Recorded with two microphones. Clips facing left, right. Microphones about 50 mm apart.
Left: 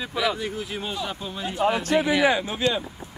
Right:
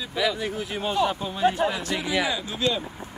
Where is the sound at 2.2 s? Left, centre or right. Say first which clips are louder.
Left 5 dB; left.